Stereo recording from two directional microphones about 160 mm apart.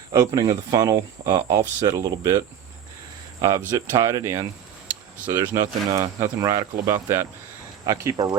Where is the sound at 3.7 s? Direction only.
20° right (ahead or behind).